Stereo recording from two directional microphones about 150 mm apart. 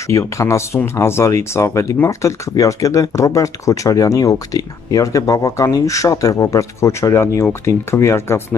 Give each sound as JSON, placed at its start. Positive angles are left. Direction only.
{"t": 0.1, "sound": "speech", "side_deg": 20}